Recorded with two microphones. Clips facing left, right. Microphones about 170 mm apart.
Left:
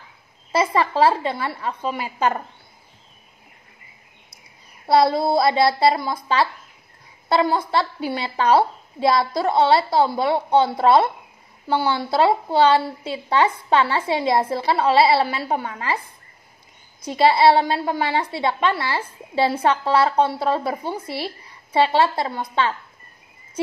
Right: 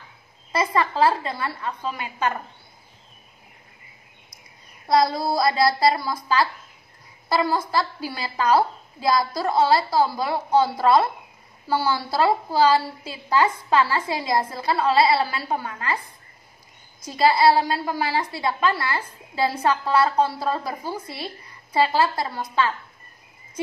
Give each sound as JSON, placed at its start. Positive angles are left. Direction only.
{"t": 0.5, "sound": "a woman's voice", "side_deg": 30}
{"t": 4.8, "sound": "a woman's voice", "side_deg": 30}
{"t": 17.1, "sound": "a woman's voice", "side_deg": 25}